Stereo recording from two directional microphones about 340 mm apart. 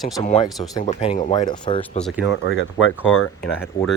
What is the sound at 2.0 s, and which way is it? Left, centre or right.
Speech, centre.